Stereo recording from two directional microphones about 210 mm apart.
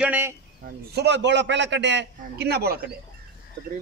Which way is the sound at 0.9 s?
55° right (ahead or behind).